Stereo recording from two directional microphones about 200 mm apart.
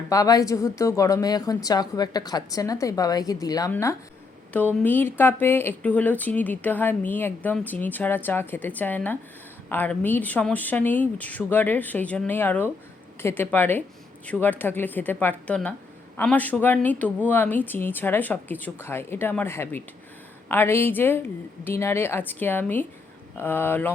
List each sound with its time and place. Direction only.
0.1 s speech: 15° left (ahead or behind)